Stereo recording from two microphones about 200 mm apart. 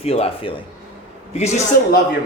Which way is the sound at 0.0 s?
30° left (ahead or behind).